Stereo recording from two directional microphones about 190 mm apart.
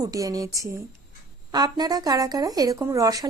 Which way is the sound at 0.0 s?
20° right (ahead or behind).